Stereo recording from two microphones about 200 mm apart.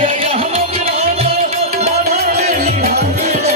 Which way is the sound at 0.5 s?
30° right (ahead or behind).